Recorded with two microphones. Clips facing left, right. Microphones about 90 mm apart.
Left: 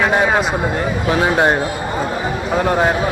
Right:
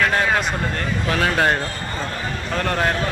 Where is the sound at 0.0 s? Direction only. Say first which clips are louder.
Left 4 dB; 15° left (ahead or behind).